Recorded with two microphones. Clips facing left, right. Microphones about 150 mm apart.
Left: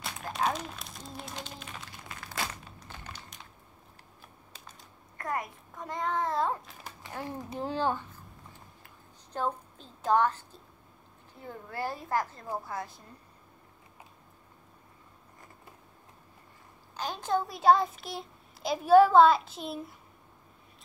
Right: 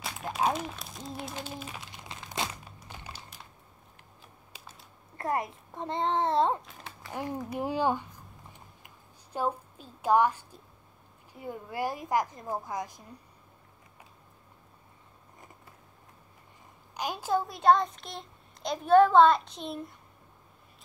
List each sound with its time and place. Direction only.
0.0 s a sound: 5° right (ahead or behind)
1.9 s crumpling: 20° right (ahead or behind)
4.5 s typing: 5° right (ahead or behind)
5.1 s a child's voice: 25° right (ahead or behind)
7.5 s a sound: 15° right (ahead or behind)
11.3 s a woman's voice: 15° right (ahead or behind)
16.9 s a child's voice: 10° right (ahead or behind)